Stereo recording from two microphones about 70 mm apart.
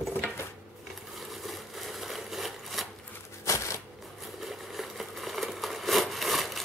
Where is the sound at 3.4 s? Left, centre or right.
Left.